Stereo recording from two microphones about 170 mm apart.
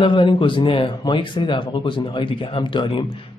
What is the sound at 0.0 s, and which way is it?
Speech, 30° left (ahead or behind).